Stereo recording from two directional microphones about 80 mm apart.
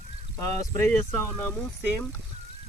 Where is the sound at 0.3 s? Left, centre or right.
Left.